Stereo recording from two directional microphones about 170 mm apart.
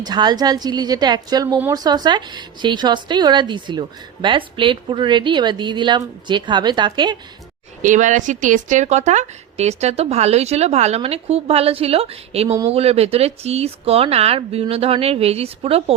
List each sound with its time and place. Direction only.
0.0 s speech: 25° right (ahead or behind)
7.8 s speech: 45° right (ahead or behind)